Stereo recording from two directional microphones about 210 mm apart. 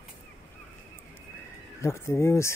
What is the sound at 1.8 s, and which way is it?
Speech, 15° left (ahead or behind).